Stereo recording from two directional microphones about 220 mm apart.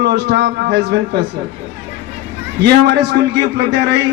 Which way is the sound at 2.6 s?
50° right (ahead or behind).